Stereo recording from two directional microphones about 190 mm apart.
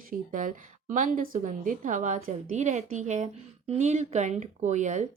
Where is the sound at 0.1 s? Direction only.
45° right (ahead or behind).